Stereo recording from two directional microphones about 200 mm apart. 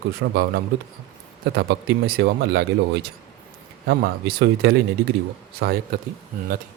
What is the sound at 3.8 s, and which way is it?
Speech, 50° right (ahead or behind).